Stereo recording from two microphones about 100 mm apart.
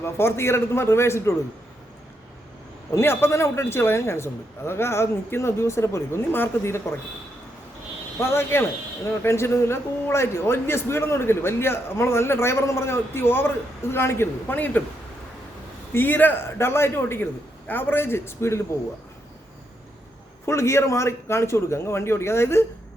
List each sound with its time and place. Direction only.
0.0 s a man's voice: 25° left (ahead or behind)
2.9 s a man's voice: 25° left (ahead or behind)
8.2 s a man's voice: 25° left (ahead or behind)
15.9 s a man's voice: 20° left (ahead or behind)
20.4 s a man's voice: 25° left (ahead or behind)